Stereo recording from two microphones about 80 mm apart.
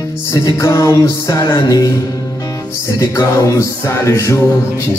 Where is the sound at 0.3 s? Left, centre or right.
Left.